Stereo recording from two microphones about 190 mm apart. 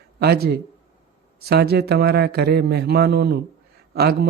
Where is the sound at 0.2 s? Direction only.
55° right (ahead or behind).